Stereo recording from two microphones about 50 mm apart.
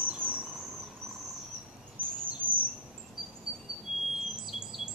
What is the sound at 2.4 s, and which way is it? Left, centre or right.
Bird, right.